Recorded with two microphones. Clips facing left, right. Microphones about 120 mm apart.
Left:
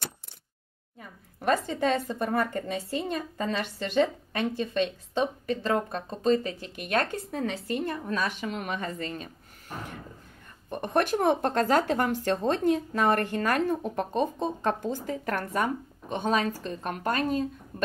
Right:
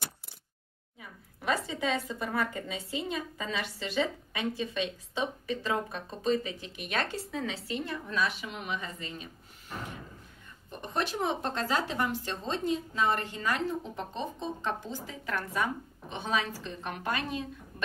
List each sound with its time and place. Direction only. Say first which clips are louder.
0.9 s speech: left 3 dB; 50° left (ahead or behind)
10.7 s speech: left 7 dB; 55° left (ahead or behind)